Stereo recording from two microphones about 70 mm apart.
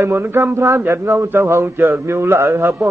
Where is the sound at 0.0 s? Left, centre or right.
Right.